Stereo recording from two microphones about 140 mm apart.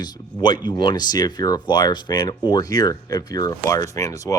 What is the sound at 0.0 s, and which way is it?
Speech, 30° left (ahead or behind).